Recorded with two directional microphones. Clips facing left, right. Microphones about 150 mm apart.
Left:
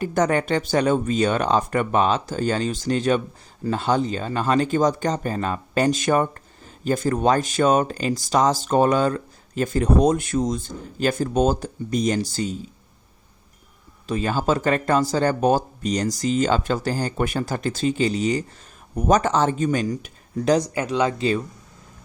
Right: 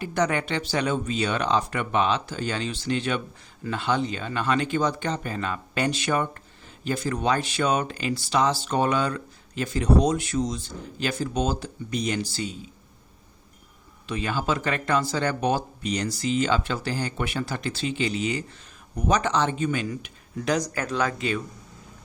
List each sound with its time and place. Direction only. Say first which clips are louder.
0.0 s speech: left 4 dB; 45° left (ahead or behind)
14.1 s speech: left 5 dB; 40° left (ahead or behind)